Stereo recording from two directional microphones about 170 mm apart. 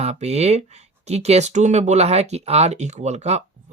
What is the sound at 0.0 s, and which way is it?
Speech, 40° right (ahead or behind).